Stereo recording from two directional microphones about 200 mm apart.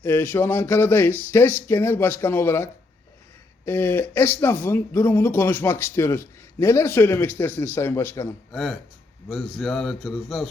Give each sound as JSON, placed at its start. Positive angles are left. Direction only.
{"t": 0.0, "sound": "speech", "side_deg": 10}
{"t": 3.7, "sound": "a man's voice", "side_deg": 10}